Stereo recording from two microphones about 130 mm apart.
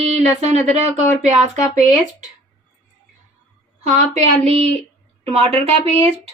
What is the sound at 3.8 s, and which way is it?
Speech, 55° right (ahead or behind).